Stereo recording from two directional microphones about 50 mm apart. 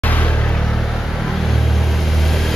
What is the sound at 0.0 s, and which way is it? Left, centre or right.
Vehicle, left.